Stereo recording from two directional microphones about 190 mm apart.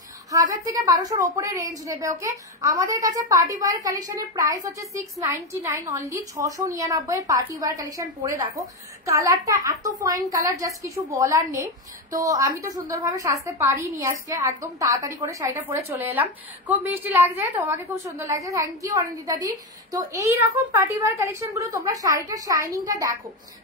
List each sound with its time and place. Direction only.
0.3 s a woman's voice: 20° right (ahead or behind)